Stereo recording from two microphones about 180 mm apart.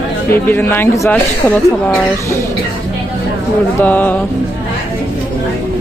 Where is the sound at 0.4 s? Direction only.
10° left (ahead or behind).